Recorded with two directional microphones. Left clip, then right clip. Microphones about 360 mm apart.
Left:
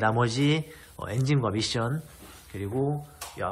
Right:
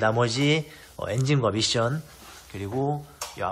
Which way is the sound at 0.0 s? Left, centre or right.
Centre.